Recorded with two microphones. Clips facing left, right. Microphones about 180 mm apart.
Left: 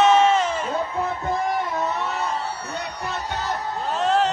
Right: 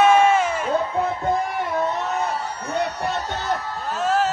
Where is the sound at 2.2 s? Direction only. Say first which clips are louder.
Right 1 dB; 55° right (ahead or behind).